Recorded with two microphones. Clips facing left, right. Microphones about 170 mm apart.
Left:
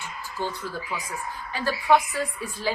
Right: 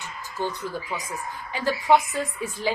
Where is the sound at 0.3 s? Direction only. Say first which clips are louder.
Right 2 dB; 20° right (ahead or behind).